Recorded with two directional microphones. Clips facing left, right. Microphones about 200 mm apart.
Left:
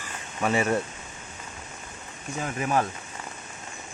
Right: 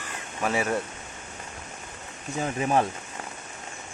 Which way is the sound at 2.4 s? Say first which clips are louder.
Right 2 dB; 25° right (ahead or behind).